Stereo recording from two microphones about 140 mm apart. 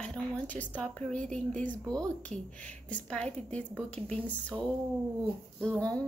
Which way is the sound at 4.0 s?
50° right (ahead or behind).